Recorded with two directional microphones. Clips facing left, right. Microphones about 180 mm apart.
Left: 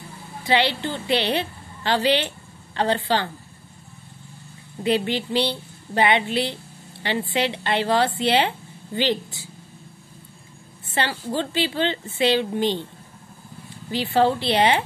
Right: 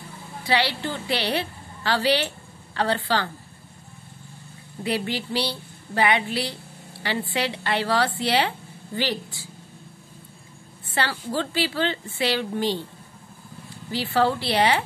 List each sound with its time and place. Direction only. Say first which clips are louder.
0.4 s a woman's voice: left 3 dB; 20° left (ahead or behind)
4.8 s a woman's voice: left 4 dB; 20° left (ahead or behind)
11.0 s a woman's voice: left 1 dB; 20° left (ahead or behind)
13.9 s a woman's voice: left 3 dB; 20° left (ahead or behind)